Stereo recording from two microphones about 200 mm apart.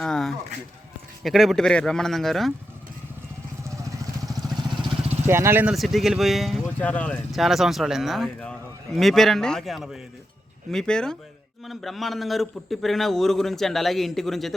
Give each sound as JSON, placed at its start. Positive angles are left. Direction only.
{"t": 0.0, "sound": "speech", "side_deg": 0}
{"t": 3.6, "sound": "vehicle", "side_deg": -15}
{"t": 4.8, "sound": "speech", "side_deg": -15}